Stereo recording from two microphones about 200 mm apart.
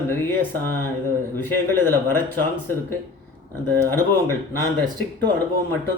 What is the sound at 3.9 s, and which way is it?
Speech, 10° left (ahead or behind).